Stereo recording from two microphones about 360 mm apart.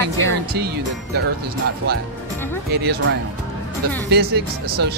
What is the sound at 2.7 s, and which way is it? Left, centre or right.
Speech, right.